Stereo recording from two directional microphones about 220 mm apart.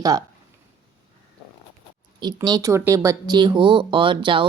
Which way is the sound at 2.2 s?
20° right (ahead or behind).